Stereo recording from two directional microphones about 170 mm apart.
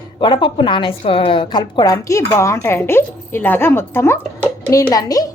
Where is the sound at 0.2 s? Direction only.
30° left (ahead or behind).